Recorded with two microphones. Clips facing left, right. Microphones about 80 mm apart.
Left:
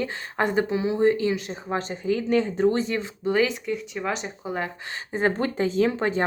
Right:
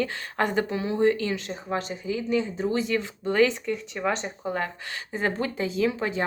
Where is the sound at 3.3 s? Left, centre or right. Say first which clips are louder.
Right 1 dB; centre.